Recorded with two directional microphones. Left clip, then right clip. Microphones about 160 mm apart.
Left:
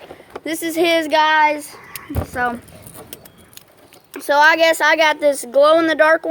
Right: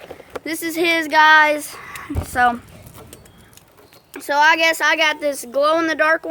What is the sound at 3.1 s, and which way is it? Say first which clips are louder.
Keys jangling: left 3 dB; 55° left (ahead or behind).